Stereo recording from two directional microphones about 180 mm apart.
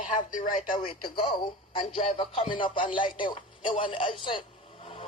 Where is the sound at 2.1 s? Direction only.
35° left (ahead or behind).